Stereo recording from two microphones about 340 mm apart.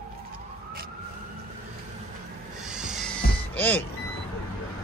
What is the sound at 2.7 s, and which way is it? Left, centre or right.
Music, centre.